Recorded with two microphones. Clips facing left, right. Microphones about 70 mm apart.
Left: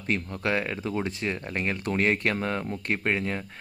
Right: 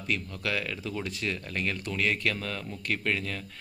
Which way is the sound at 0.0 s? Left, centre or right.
Left.